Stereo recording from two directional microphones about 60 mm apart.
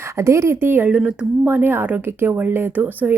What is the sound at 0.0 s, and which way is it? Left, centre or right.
Speech, right.